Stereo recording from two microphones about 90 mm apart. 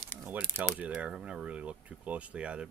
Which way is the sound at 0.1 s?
20° right (ahead or behind).